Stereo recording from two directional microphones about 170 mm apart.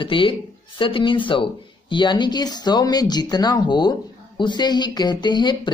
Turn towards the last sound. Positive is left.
turn(degrees=25)  # may be behind; listen again after turning